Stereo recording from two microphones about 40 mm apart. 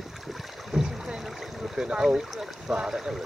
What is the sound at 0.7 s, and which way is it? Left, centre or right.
Boat, centre.